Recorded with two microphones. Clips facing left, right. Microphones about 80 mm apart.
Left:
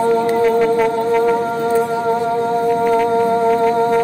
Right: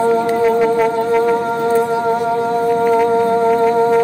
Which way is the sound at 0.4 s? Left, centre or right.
Centre.